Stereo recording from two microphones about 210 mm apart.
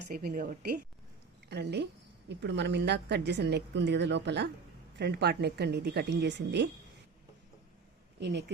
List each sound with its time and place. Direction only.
0.1 s a woman's voice: 45° right (ahead or behind)
8.2 s speech: 55° right (ahead or behind)